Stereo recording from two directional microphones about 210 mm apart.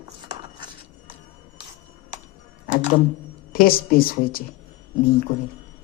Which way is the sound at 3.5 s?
45° left (ahead or behind).